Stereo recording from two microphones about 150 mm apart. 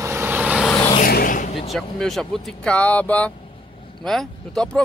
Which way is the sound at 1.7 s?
Centre (ahead or behind).